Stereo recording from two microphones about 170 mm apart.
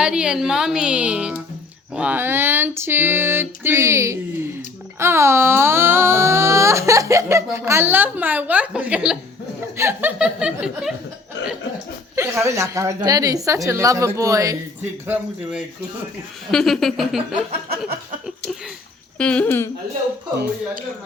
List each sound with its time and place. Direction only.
0.0 s a woman's voice: 5° right (ahead or behind)
12.1 s a woman's voice: 15° right (ahead or behind)
16.5 s a woman's voice: centre (ahead or behind)
19.2 s speech: 5° left (ahead or behind)